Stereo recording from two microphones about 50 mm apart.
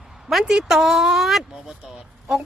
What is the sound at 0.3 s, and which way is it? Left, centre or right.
A woman's voice, centre.